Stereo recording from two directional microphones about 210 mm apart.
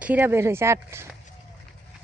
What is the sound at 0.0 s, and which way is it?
Speech, 10° right (ahead or behind).